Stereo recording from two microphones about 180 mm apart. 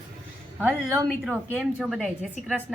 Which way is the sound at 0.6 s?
15° right (ahead or behind).